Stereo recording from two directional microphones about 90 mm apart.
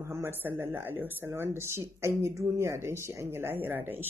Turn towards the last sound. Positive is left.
turn(degrees=-20)  # may be behind; listen again after turning